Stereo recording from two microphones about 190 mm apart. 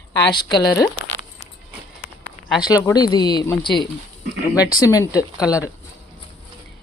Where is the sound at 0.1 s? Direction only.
25° left (ahead or behind).